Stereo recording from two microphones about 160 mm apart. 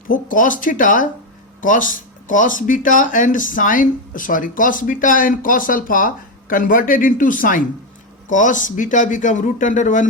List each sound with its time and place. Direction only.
0.1 s a man's voice: 55° left (ahead or behind)